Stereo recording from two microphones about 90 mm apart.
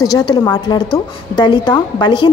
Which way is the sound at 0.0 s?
50° left (ahead or behind).